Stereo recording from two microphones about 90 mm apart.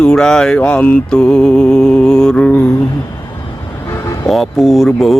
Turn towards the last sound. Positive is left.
turn(degrees=0)  # may be behind; listen again after turning